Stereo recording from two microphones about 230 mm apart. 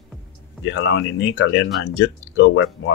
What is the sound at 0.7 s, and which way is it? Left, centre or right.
Speech, left.